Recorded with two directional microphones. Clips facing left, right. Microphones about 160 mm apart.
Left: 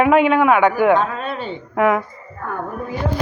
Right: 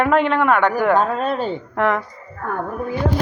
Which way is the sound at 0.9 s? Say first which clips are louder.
Right 1 dB; 40° right (ahead or behind).